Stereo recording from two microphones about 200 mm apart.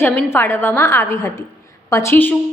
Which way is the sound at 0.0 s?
10° left (ahead or behind).